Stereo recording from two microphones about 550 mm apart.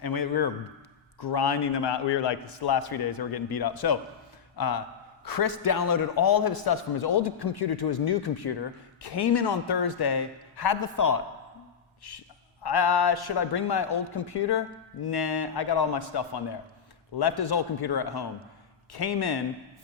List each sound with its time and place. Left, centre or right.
0.0 s a man's voice: left
12.6 s a man's voice: left